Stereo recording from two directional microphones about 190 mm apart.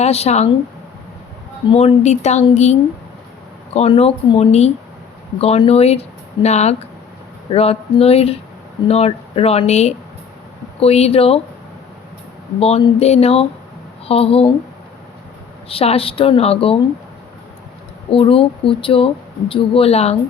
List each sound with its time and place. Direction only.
0.0 s speech: 35° left (ahead or behind)
1.7 s speech: 35° left (ahead or behind)
3.8 s speech: 30° left (ahead or behind)
12.5 s speech: 30° left (ahead or behind)
15.7 s speech: 30° left (ahead or behind)
18.1 s speech: 30° left (ahead or behind)